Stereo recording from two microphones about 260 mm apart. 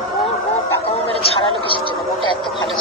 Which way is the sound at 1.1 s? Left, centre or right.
Left.